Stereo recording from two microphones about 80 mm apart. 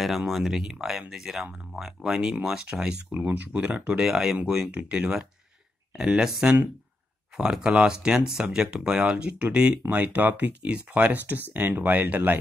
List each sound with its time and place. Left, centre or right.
0.0 s speech: centre; by 12.4 s right